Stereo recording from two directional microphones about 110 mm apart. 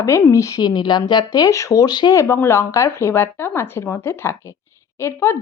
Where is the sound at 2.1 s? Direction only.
25° left (ahead or behind).